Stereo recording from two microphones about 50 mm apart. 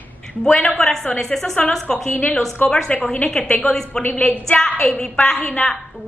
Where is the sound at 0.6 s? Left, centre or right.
Centre.